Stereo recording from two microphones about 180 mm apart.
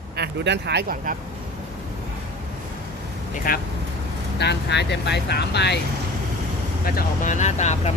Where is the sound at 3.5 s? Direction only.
50° left (ahead or behind).